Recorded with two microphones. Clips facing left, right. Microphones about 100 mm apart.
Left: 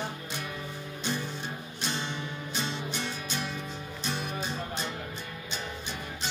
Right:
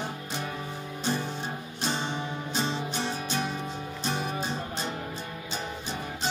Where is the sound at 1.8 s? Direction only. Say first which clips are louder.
Right 4 dB; 35° right (ahead or behind).